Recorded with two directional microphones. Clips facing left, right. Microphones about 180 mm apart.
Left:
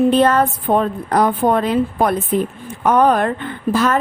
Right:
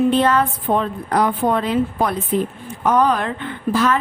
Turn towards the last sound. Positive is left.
turn(degrees=45)  # may be behind; listen again after turning